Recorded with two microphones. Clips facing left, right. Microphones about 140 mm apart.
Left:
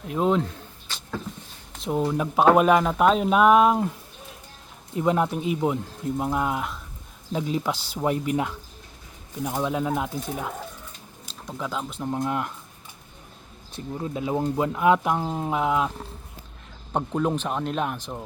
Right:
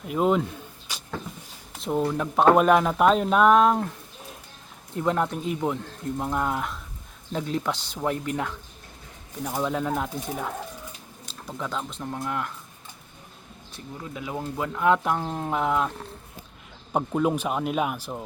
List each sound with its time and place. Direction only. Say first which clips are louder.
0.1 s speech: even; 5° right (ahead or behind)
0.9 s vehicle: even; 10° right (ahead or behind)
1.7 s a sound: even; centre (ahead or behind)
2.0 s speech: left 1 dB; 10° left (ahead or behind)
4.9 s speech: left 2 dB; 10° left (ahead or behind)
12.1 s speech: left 4 dB; 20° left (ahead or behind)
14.0 s speech: left 7 dB; 30° left (ahead or behind); by 18.2 s 5° right (ahead or behind)